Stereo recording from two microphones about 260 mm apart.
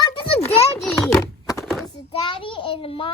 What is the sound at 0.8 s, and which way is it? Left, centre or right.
Speech, centre.